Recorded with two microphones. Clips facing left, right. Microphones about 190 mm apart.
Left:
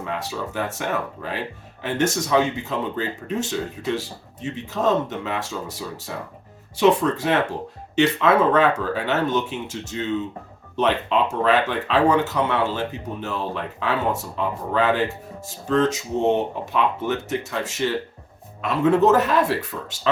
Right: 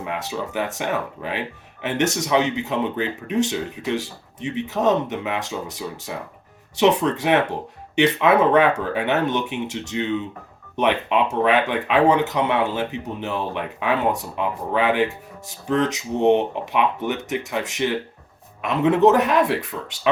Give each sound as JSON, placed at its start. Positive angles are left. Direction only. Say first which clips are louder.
{"t": 0.0, "sound": "speech", "louder": "right 1 dB", "side_deg": -20}